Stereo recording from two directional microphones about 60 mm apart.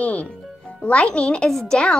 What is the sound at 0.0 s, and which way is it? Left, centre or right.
Speech, left.